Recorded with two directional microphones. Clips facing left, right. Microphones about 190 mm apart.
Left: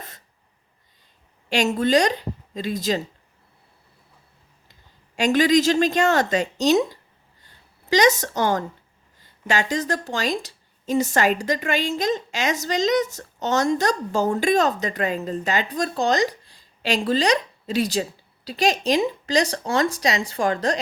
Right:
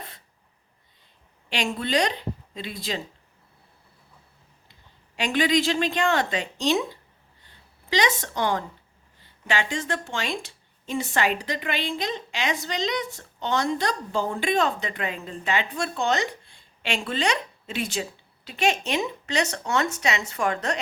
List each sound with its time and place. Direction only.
1.5 s a woman's voice: 45° left (ahead or behind)
4.7 s a woman's voice: 45° left (ahead or behind)